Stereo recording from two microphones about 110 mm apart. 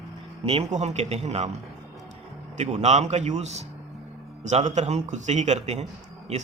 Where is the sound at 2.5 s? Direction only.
90° right.